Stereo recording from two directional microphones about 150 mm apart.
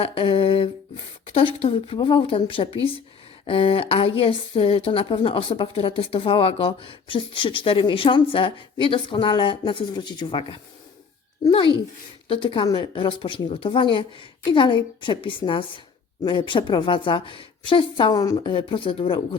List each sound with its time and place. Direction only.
0.0 s a sound: 40° left (ahead or behind)
1.5 s a woman's voice: 40° left (ahead or behind)
12.3 s a woman's voice: 35° left (ahead or behind)